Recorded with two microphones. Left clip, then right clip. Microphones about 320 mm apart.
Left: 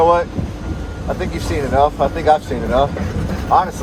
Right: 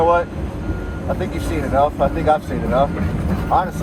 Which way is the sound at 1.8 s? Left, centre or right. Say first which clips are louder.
Left 2 dB; left.